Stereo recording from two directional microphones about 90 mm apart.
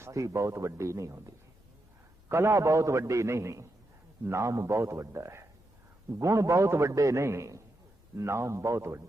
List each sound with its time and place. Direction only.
0.0 s a man's voice: 35° right (ahead or behind)
2.3 s a man's voice: 30° right (ahead or behind)